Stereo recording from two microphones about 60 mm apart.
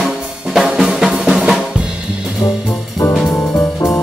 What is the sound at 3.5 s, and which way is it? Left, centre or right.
Music, left.